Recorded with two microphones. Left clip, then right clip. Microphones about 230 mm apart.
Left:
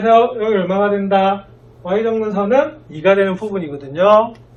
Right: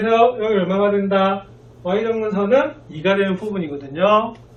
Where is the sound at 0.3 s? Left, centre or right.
Centre.